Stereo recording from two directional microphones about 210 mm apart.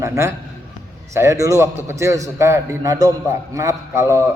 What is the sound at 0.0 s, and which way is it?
A man's voice, 15° right (ahead or behind).